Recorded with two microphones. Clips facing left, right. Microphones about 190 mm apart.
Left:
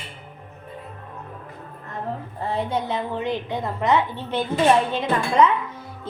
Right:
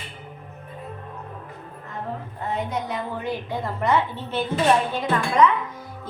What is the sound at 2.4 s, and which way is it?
A woman's voice, 30° left (ahead or behind).